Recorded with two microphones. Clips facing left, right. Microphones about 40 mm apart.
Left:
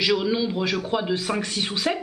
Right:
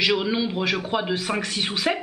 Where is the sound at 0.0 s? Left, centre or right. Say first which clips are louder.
Even; centre.